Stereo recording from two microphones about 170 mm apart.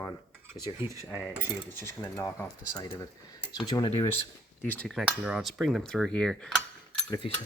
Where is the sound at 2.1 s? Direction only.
15° left (ahead or behind).